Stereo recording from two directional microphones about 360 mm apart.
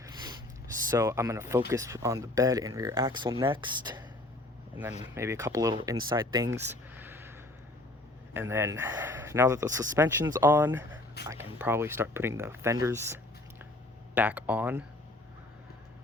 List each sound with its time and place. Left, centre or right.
0.9 s speech: centre
5.1 s speech: centre
14.2 s speech: centre